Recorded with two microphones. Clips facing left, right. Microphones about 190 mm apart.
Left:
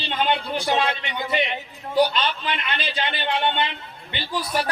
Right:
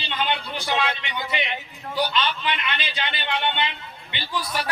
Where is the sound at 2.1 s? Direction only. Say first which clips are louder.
Even; 40° left (ahead or behind).